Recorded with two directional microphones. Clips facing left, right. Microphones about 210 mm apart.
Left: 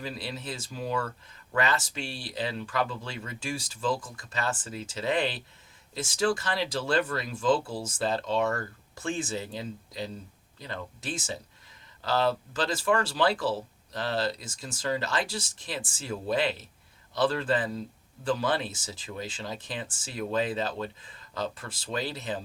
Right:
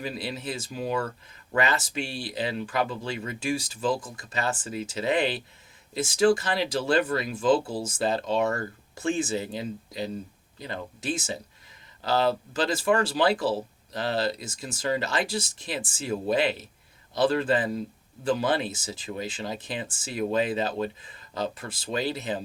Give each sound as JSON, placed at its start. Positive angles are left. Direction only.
{"t": 0.0, "sound": "speech", "side_deg": -15}